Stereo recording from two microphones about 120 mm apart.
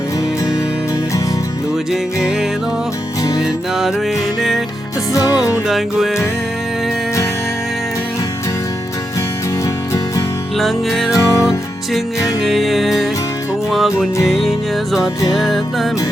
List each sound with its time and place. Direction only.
3.4 s music: centre (ahead or behind)
5.1 s music: 30° left (ahead or behind)
5.6 s music: centre (ahead or behind)
10.6 s music: centre (ahead or behind)
11.1 s music: 25° left (ahead or behind)
12.4 s music: centre (ahead or behind)